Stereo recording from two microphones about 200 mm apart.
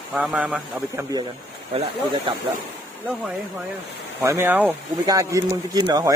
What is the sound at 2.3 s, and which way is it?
Speech, 25° right (ahead or behind).